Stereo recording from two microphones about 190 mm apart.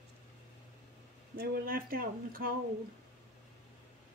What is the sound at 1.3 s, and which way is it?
Speech, 50° right (ahead or behind).